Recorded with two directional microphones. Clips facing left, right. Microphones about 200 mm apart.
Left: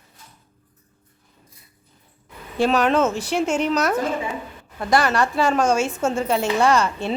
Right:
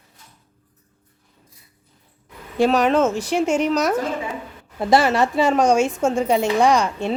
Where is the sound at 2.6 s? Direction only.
10° right (ahead or behind).